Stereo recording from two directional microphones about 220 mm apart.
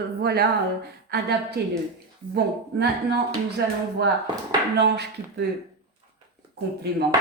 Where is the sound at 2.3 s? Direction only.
50° right (ahead or behind).